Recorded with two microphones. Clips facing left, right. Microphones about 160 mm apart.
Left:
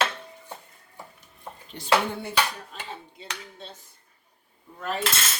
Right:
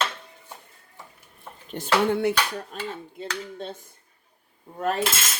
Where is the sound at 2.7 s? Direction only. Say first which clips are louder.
Right 8 dB; 50° right (ahead or behind).